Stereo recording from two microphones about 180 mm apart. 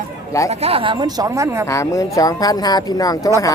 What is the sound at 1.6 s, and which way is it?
Speech, 15° left (ahead or behind).